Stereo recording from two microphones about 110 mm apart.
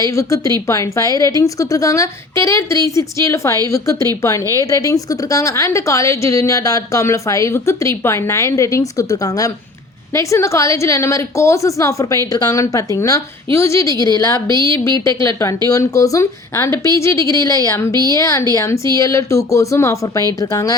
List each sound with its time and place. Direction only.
0.0 s a woman's voice: 30° left (ahead or behind)